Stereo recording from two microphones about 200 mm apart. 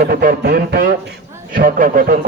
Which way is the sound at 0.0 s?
50° right (ahead or behind).